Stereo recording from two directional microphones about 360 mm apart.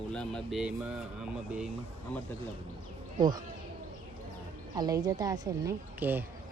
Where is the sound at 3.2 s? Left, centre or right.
Centre.